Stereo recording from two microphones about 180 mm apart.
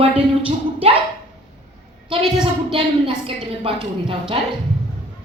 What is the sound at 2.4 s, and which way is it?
A woman's voice, 30° right (ahead or behind).